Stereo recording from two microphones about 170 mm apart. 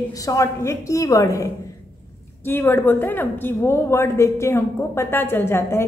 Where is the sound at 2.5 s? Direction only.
15° left (ahead or behind).